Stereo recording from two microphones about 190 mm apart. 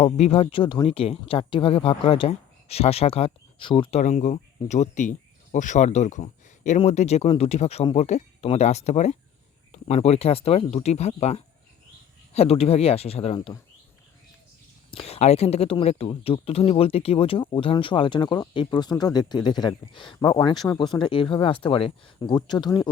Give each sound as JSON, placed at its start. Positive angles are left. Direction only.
{"t": 0.0, "sound": "speech", "side_deg": 30}
{"t": 4.0, "sound": "speech", "side_deg": 40}
{"t": 14.8, "sound": "speech", "side_deg": 30}